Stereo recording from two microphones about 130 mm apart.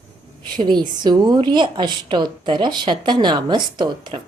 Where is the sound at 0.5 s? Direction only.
35° right (ahead or behind).